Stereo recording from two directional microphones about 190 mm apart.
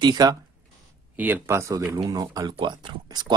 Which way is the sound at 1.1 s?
10° right (ahead or behind).